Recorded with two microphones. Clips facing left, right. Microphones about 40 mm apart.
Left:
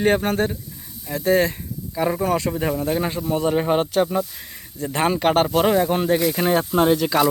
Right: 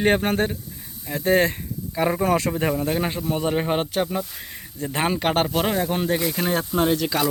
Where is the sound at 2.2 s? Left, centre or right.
Right.